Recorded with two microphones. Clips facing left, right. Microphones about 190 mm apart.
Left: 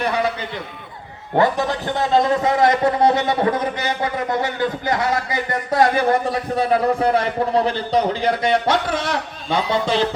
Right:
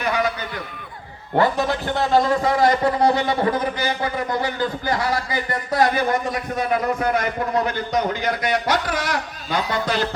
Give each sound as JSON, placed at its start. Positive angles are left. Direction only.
{"t": 0.0, "sound": "a man's voice", "side_deg": 30}
{"t": 1.4, "sound": "speech", "side_deg": 15}